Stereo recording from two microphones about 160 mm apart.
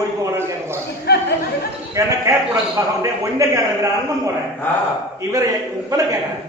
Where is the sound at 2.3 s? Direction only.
20° right (ahead or behind).